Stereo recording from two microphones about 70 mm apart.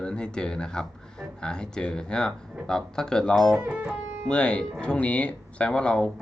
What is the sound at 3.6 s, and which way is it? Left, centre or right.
Speech, centre.